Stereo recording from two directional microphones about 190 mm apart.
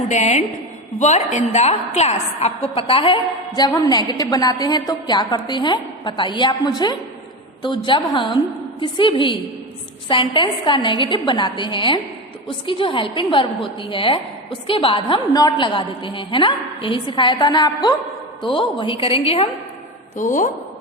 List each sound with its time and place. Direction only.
0.1 s a woman's voice: 35° left (ahead or behind)
20.1 s a woman's voice: 45° left (ahead or behind)